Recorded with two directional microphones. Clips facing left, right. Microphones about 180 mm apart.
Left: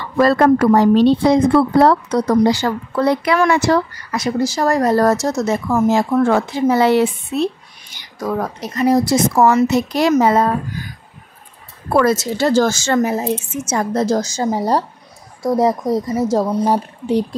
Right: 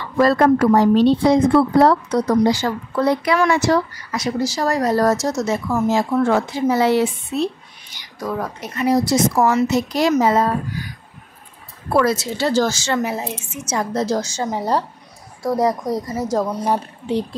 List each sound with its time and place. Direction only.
0.2 s a woman's voice: 65° left (ahead or behind)
8.4 s a woman's voice: 40° left (ahead or behind)
11.9 s a woman's voice: 50° left (ahead or behind)
15.4 s speech: 25° left (ahead or behind)
17.0 s a woman's voice: 45° left (ahead or behind)